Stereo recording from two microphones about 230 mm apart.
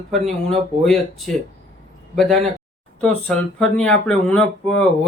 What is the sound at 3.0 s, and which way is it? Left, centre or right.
Speech, centre.